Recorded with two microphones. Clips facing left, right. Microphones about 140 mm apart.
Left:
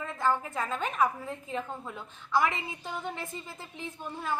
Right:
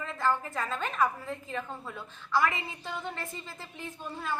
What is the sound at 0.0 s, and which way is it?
A woman's voice, 15° left (ahead or behind).